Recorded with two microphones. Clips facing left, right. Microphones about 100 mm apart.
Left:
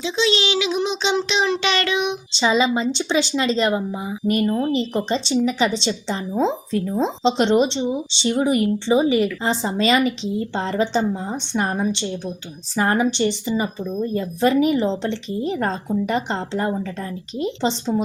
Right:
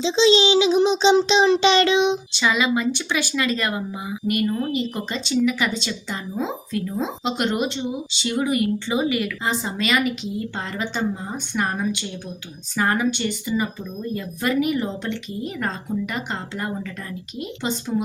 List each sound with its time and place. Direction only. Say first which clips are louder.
0.0 s speech: right 4 dB; 25° right (ahead or behind)
2.4 s speech: left 3 dB; 25° left (ahead or behind)